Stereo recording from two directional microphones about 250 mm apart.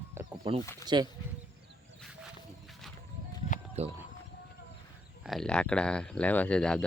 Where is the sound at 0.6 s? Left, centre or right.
Centre.